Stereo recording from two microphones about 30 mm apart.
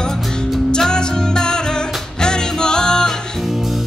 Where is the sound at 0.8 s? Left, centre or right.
Left.